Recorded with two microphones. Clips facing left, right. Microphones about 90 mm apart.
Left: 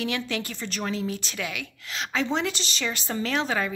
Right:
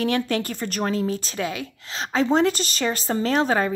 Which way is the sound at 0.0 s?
45° right (ahead or behind).